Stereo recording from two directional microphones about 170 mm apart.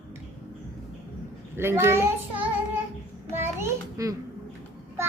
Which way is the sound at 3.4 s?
15° right (ahead or behind).